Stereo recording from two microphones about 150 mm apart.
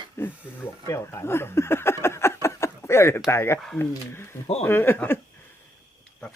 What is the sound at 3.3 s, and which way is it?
Speech, 20° left (ahead or behind).